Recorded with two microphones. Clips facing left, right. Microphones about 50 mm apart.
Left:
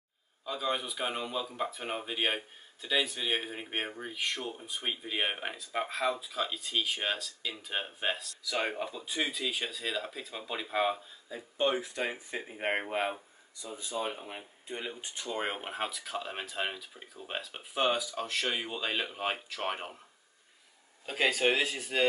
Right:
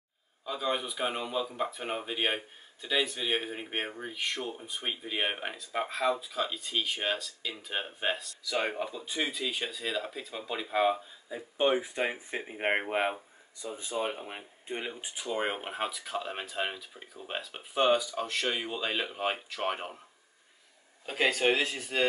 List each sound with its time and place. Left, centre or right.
0.5 s speech: centre
11.2 s speech: centre
14.9 s speech: centre
21.0 s speech: centre